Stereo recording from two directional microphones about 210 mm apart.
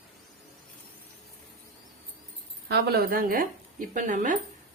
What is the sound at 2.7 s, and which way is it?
Speech, 50° right (ahead or behind).